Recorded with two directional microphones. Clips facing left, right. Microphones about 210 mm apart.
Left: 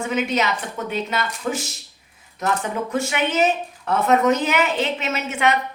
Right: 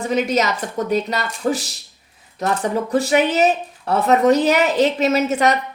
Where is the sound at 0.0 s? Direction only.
40° right (ahead or behind).